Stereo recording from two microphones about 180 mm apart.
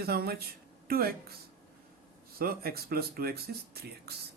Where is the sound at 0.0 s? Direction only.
60° right (ahead or behind).